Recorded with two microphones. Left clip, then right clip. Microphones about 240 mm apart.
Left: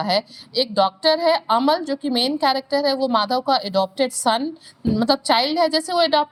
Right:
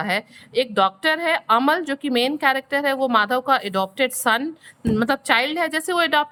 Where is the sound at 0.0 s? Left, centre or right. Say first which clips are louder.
Left 3 dB; right.